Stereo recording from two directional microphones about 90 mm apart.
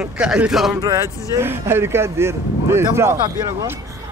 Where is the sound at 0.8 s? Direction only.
40° right (ahead or behind).